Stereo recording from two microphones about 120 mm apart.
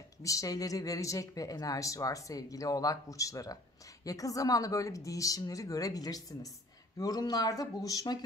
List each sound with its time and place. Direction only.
0.2 s speech: 25° left (ahead or behind)